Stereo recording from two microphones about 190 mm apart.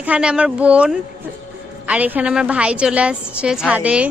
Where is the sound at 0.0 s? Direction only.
5° right (ahead or behind).